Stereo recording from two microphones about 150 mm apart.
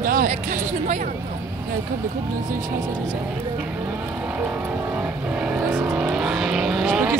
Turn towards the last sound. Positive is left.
turn(degrees=-5)  # may be behind; listen again after turning